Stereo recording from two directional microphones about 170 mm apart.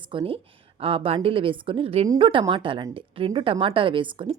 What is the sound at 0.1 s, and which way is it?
A woman's voice, 30° right (ahead or behind).